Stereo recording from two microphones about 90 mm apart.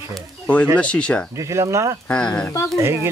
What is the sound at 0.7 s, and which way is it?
Speech, 10° left (ahead or behind).